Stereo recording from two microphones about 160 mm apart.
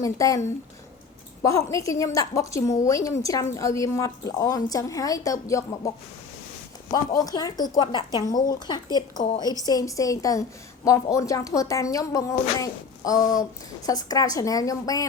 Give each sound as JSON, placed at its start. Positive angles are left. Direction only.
{"t": 0.0, "sound": "a woman's voice", "side_deg": 20}
{"t": 7.2, "sound": "a woman's voice", "side_deg": 25}